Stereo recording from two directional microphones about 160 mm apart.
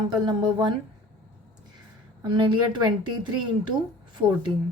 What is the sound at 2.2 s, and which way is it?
Speech, 30° right (ahead or behind).